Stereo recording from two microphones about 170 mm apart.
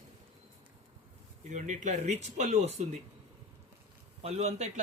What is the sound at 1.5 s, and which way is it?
Speech, 45° right (ahead or behind).